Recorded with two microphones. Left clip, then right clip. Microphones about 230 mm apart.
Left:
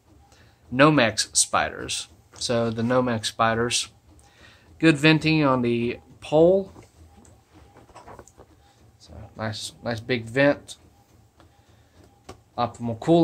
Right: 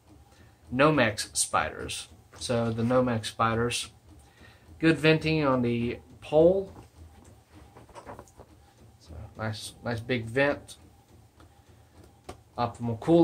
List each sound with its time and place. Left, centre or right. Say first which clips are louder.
0.7 s speech: left 5 dB; left
9.0 s speech: left 4 dB; left
12.5 s speech: left 4 dB; left